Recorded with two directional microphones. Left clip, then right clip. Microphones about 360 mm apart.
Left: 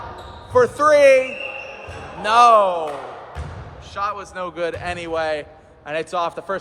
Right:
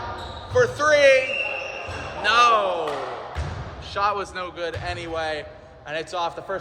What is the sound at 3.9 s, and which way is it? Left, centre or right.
Speech, centre.